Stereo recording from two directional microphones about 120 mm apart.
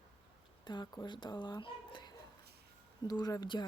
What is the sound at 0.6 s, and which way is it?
Speech, 40° left (ahead or behind).